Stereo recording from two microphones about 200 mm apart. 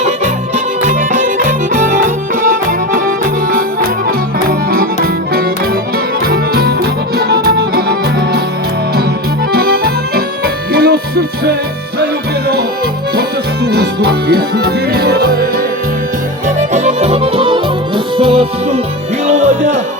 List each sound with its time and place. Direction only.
0.5 s music: 40° right (ahead or behind)
4.4 s music: 45° right (ahead or behind)
6.2 s music: 50° right (ahead or behind)
9.5 s accordion: 50° right (ahead or behind)
13.7 s music: 55° right (ahead or behind)
16.6 s music: 35° right (ahead or behind)